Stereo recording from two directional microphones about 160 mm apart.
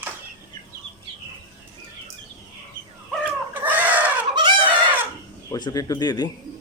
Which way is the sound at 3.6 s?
10° right (ahead or behind).